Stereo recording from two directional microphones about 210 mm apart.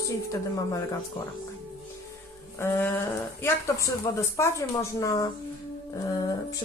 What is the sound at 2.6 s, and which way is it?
Speech, 10° left (ahead or behind).